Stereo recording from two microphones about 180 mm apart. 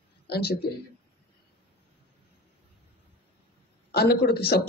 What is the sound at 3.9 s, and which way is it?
Speech, 60° left (ahead or behind).